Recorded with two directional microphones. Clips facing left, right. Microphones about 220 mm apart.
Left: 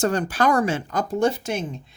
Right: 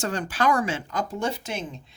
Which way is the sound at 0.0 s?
40° left (ahead or behind).